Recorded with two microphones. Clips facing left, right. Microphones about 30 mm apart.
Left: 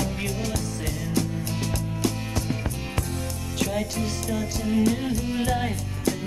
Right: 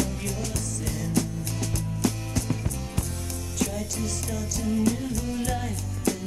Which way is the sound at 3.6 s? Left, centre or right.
Left.